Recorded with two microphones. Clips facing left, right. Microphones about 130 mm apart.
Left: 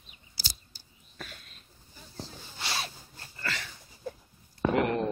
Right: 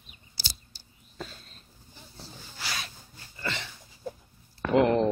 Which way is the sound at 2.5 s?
25° left (ahead or behind).